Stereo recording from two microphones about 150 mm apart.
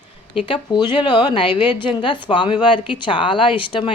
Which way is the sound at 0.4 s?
30° left (ahead or behind).